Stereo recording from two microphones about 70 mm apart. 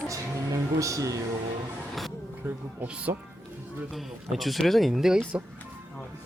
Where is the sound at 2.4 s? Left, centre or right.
Right.